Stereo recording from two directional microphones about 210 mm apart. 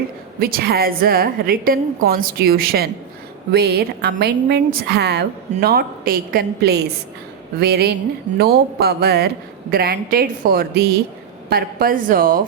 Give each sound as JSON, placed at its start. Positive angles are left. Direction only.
{"t": 0.3, "sound": "a woman's voice", "side_deg": -45}